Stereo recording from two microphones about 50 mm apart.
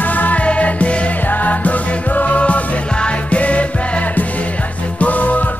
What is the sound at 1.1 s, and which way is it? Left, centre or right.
Music, left.